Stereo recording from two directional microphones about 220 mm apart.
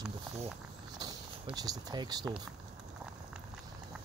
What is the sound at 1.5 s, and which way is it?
Speech, 15° right (ahead or behind).